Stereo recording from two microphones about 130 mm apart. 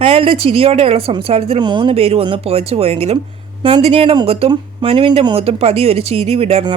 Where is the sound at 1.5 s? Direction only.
35° right (ahead or behind).